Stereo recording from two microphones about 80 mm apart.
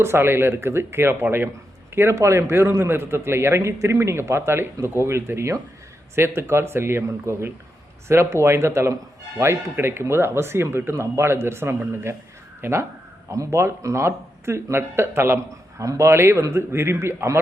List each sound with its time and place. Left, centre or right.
0.0 s a man's voice: right